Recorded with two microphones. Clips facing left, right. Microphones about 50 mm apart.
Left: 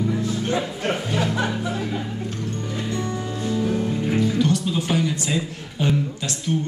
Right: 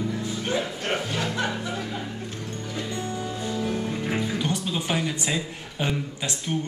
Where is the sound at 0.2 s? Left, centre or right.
Centre.